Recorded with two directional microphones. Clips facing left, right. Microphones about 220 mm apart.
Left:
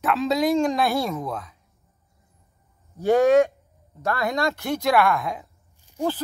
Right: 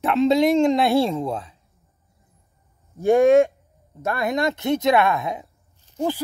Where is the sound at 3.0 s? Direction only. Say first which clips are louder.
Right 2 dB; 25° right (ahead or behind).